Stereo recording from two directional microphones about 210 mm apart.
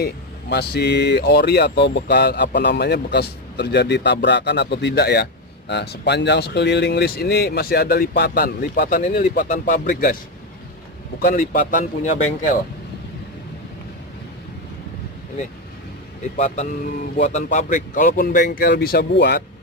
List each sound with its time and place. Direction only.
0.0 s speech: 50° left (ahead or behind)
11.1 s speech: 40° left (ahead or behind)
16.3 s speech: 35° left (ahead or behind); by 19.4 s 55° left (ahead or behind)